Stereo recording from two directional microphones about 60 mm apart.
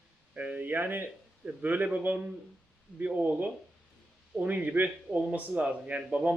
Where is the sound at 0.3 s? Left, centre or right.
Right.